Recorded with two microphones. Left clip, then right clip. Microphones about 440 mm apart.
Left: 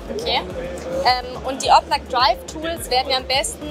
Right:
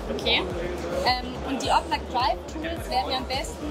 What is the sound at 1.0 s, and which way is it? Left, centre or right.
Speech, left.